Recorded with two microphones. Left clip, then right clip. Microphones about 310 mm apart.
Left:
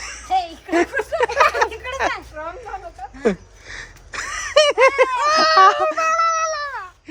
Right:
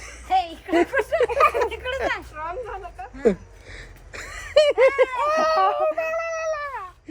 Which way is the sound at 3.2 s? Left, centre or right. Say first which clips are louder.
Even; centre.